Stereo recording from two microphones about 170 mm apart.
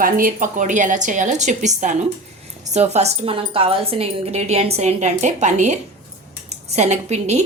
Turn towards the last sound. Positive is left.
turn(degrees=-40)  # may be behind; listen again after turning